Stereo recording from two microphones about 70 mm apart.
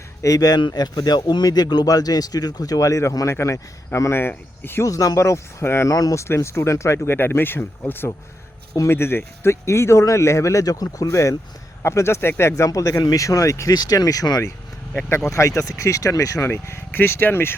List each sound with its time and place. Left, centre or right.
0.2 s speech: left
4.2 s speech: left
4.8 s speech: left
5.9 s speech: left
6.2 s speech: left
13.7 s speech: left
15.3 s speech: left
16.5 s speech: left